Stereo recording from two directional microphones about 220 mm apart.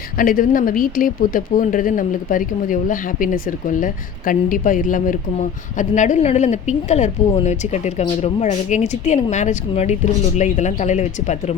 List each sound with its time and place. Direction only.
0.2 s speech: 40° left (ahead or behind)